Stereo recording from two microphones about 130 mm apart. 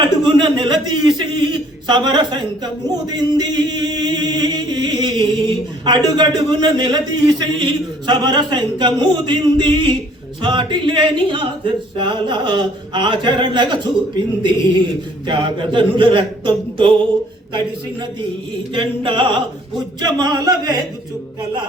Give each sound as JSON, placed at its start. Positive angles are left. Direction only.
{"t": 0.0, "sound": "a sound", "side_deg": -35}
{"t": 3.2, "sound": "singing", "side_deg": -30}
{"t": 10.4, "sound": "speech", "side_deg": -35}
{"t": 15.3, "sound": "speech", "side_deg": -40}
{"t": 18.7, "sound": "speech", "side_deg": -40}